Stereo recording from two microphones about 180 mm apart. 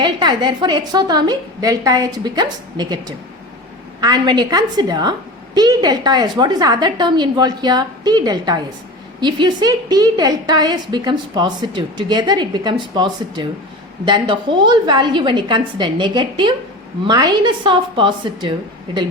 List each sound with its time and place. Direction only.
0.0 s a woman's voice: 25° right (ahead or behind)